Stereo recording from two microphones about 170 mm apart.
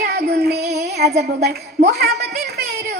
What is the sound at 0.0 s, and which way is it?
Child singing, 70° right (ahead or behind).